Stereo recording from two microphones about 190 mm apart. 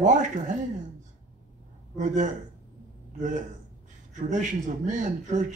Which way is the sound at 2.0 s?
40° right (ahead or behind).